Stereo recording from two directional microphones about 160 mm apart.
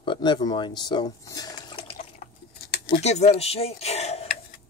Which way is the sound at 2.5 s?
75° left (ahead or behind).